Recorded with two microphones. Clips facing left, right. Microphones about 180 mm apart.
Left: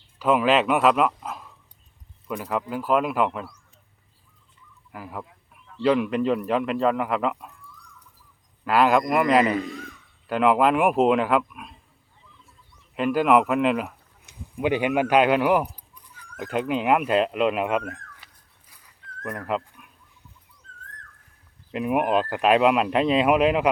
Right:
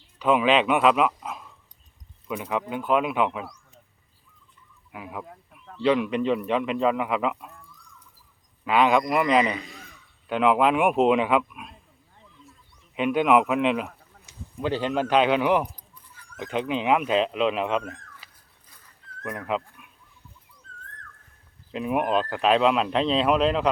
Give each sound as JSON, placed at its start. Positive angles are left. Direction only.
{"t": 0.2, "sound": "a man's voice", "side_deg": 5}
{"t": 4.9, "sound": "speech", "side_deg": 0}
{"t": 5.2, "sound": "a sound", "side_deg": -50}
{"t": 5.8, "sound": "speech", "side_deg": 0}
{"t": 8.6, "sound": "speech", "side_deg": 5}
{"t": 9.5, "sound": "a man's voice", "side_deg": 50}
{"t": 10.2, "sound": "speech", "side_deg": 0}
{"t": 13.0, "sound": "speech", "side_deg": 0}
{"t": 14.5, "sound": "speech", "side_deg": 15}
{"t": 18.7, "sound": "a sound", "side_deg": 15}
{"t": 19.2, "sound": "speech", "side_deg": 0}
{"t": 20.7, "sound": "a sound", "side_deg": -35}
{"t": 21.7, "sound": "speech", "side_deg": 5}